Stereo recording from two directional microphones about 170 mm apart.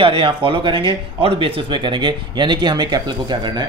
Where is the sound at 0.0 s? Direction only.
30° right (ahead or behind).